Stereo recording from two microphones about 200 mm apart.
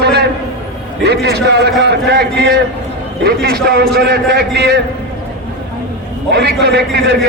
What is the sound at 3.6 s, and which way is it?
Speech, 55° right (ahead or behind).